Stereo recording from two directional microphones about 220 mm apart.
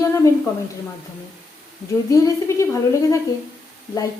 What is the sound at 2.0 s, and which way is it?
A woman's voice, 15° left (ahead or behind).